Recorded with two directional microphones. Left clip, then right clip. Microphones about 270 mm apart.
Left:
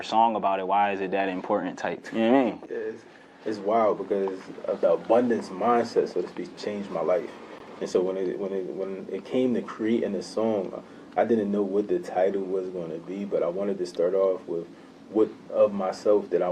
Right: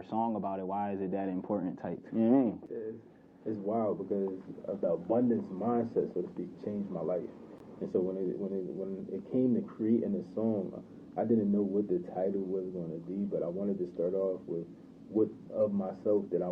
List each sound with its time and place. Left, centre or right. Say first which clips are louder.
0.0 s a man's voice: left 12 dB; centre
12.1 s speech: left 12 dB; centre
13.6 s speech: left 8 dB; centre